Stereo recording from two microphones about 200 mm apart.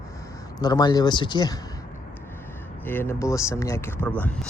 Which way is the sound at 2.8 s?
10° left (ahead or behind).